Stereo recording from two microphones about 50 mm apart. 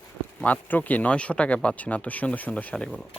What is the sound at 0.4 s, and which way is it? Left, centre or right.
Speech, left.